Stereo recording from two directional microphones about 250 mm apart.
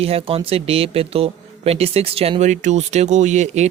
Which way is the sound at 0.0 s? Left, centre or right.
Right.